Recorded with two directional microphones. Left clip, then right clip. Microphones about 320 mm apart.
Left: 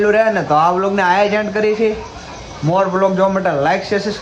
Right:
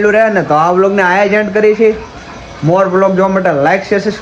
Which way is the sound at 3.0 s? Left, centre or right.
Centre.